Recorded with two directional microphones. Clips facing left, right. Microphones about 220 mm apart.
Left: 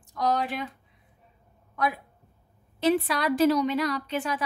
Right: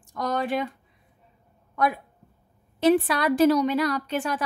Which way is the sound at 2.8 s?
50° right (ahead or behind).